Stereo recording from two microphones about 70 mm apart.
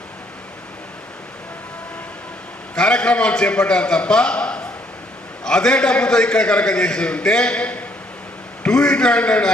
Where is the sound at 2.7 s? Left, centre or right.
Centre.